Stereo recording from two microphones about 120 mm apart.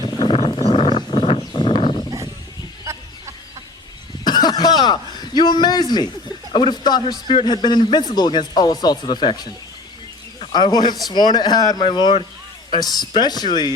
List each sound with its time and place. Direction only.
0.3 s a sound: 50° left (ahead or behind)
2.8 s chicken: 25° right (ahead or behind)
4.2 s throat clearing: 35° left (ahead or behind)
6.5 s a man's voice: 40° left (ahead or behind)
10.5 s a man's voice: 35° left (ahead or behind)